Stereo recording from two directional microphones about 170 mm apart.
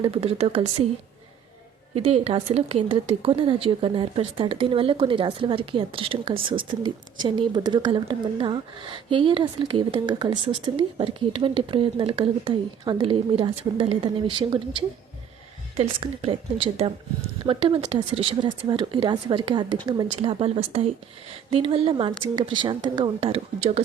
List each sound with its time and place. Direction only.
0.0 s speech: 30° right (ahead or behind)
2.0 s speech: 35° right (ahead or behind)